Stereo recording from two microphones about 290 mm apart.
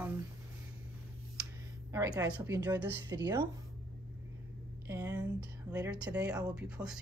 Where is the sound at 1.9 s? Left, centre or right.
Centre.